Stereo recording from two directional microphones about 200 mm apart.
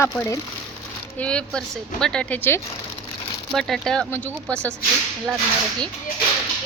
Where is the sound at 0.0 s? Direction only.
15° left (ahead or behind).